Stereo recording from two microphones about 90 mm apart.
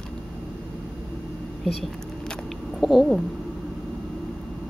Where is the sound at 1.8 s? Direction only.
Centre (ahead or behind).